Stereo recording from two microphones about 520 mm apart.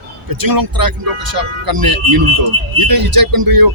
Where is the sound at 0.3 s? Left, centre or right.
Right.